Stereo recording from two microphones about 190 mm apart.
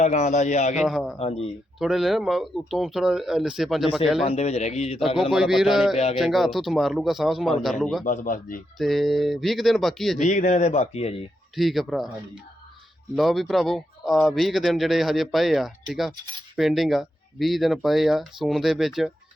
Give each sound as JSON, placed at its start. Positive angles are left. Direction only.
{"t": 0.0, "sound": "speech", "side_deg": 35}
{"t": 0.8, "sound": "speech", "side_deg": 0}
{"t": 4.2, "sound": "speech", "side_deg": 35}
{"t": 5.3, "sound": "speech", "side_deg": 0}
{"t": 8.0, "sound": "a man's voice", "side_deg": 45}
{"t": 8.8, "sound": "speech", "side_deg": 0}
{"t": 10.2, "sound": "speech", "side_deg": 40}
{"t": 11.5, "sound": "speech", "side_deg": 0}
{"t": 13.1, "sound": "speech", "side_deg": 0}